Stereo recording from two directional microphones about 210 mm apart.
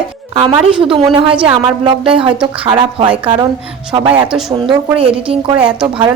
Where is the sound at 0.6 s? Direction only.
25° right (ahead or behind).